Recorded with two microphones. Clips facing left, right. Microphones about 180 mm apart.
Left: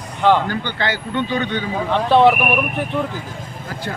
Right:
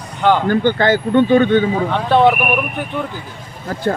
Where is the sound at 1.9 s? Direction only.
Centre (ahead or behind).